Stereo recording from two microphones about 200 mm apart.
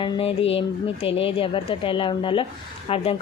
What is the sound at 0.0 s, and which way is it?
A woman's voice, 30° left (ahead or behind).